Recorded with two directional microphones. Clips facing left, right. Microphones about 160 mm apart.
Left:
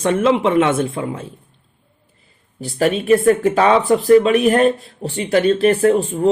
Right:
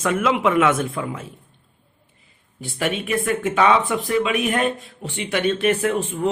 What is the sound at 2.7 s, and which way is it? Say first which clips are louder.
Speech: left 9 dB; 35° left (ahead or behind).